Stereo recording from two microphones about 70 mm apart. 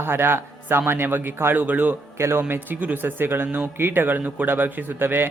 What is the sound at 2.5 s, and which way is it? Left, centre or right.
Speech, right.